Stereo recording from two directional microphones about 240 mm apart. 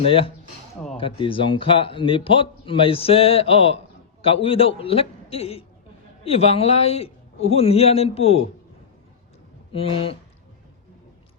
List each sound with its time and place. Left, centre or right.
0.0 s a man's voice: left
9.7 s a man's voice: left